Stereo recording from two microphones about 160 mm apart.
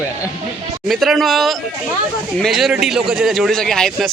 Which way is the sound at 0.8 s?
Centre (ahead or behind).